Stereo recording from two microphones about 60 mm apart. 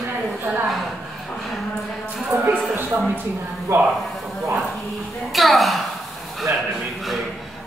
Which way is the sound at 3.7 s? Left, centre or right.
Right.